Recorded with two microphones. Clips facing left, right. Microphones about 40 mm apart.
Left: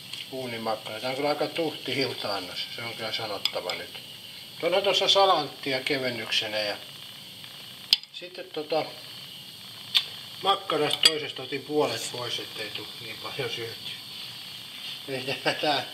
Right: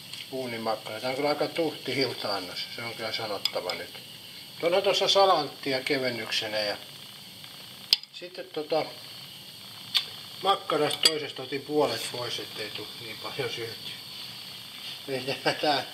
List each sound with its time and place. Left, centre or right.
0.3 s speech: centre
7.9 s a sound: left
8.4 s speech: centre
9.9 s cutlery: centre
12.2 s speech: centre